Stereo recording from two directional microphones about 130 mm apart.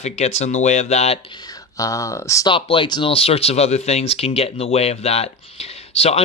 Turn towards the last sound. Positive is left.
turn(degrees=55)  # may be behind; listen again after turning